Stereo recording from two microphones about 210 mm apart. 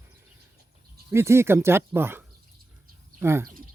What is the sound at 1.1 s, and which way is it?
Speech, 10° right (ahead or behind).